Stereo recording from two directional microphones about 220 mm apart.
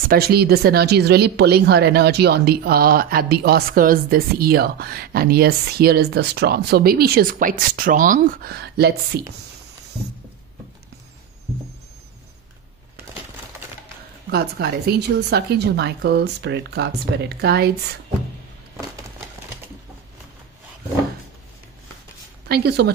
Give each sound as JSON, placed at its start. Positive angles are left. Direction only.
{"t": 0.1, "sound": "speech", "side_deg": -45}
{"t": 14.3, "sound": "speech", "side_deg": -45}
{"t": 22.5, "sound": "speech", "side_deg": -45}